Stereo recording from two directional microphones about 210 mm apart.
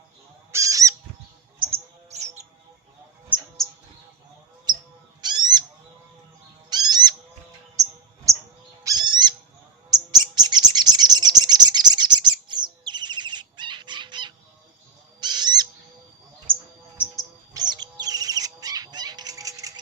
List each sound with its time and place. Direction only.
0.5 s goose: 15° right (ahead or behind)
1.5 s bird: 25° right (ahead or behind)
3.3 s mouse: 5° right (ahead or behind)
5.2 s owl: 20° right (ahead or behind)
6.7 s bird: 20° right (ahead or behind)
7.8 s mouse: 35° right (ahead or behind)
8.3 s bird: 15° right (ahead or behind)
8.8 s owl: 20° right (ahead or behind)
9.9 s bird: 20° right (ahead or behind)
15.2 s owl: 20° right (ahead or behind)
16.5 s a sound: 25° right (ahead or behind)
17.5 s bird: 20° right (ahead or behind)